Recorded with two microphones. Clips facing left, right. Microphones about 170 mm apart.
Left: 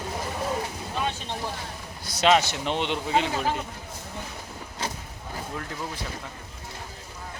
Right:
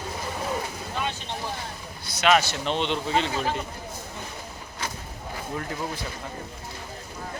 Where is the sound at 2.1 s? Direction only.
40° left (ahead or behind).